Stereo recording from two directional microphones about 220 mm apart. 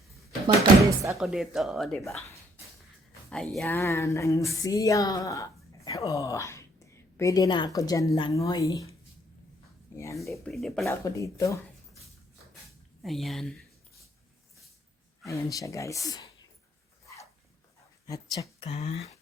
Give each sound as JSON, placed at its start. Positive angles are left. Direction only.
{"t": 0.4, "sound": "a sound", "side_deg": -20}
{"t": 1.1, "sound": "speech", "side_deg": 0}
{"t": 3.2, "sound": "speech", "side_deg": 0}
{"t": 9.9, "sound": "speech", "side_deg": 10}
{"t": 10.8, "sound": "speech", "side_deg": 15}
{"t": 13.0, "sound": "speech", "side_deg": 0}
{"t": 15.3, "sound": "speech", "side_deg": 15}
{"t": 18.0, "sound": "speech", "side_deg": 15}
{"t": 18.7, "sound": "speech", "side_deg": 25}